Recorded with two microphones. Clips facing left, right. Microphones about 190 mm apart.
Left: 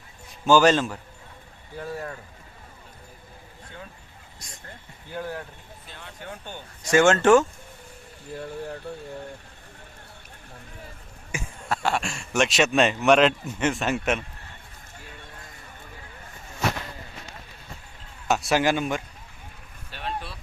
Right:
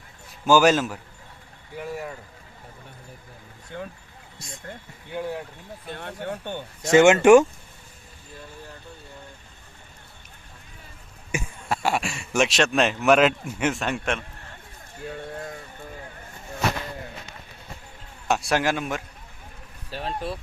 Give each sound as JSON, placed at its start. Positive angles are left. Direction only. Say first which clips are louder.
{"t": 0.4, "sound": "a man's voice", "louder": "even", "side_deg": -10}
{"t": 5.1, "sound": "speech", "louder": "right 3 dB", "side_deg": -20}
{"t": 5.9, "sound": "speech", "louder": "right 8 dB", "side_deg": -60}
{"t": 6.9, "sound": "a man's voice", "louder": "right 4 dB", "side_deg": -15}
{"t": 11.3, "sound": "speech", "louder": "right 2 dB", "side_deg": -15}
{"t": 18.3, "sound": "speech", "louder": "left 1 dB", "side_deg": 0}
{"t": 19.9, "sound": "speech", "louder": "right 4 dB", "side_deg": -35}